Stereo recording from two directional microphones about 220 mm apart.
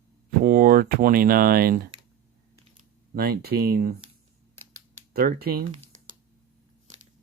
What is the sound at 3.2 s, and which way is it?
Speech, 45° right (ahead or behind).